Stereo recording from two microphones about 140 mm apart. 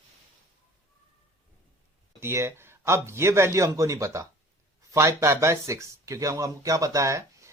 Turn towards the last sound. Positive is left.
turn(degrees=-20)  # may be behind; listen again after turning